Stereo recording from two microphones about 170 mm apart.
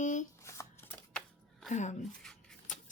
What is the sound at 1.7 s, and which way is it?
Speech, 45° left (ahead or behind).